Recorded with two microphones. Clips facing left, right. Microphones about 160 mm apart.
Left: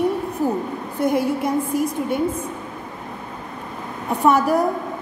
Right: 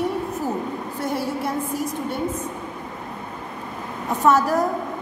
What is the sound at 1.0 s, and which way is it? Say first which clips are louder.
A woman's voice: left 6 dB; 15° left (ahead or behind).